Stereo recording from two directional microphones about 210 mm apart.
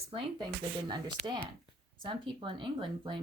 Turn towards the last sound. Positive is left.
turn(degrees=-25)  # may be behind; listen again after turning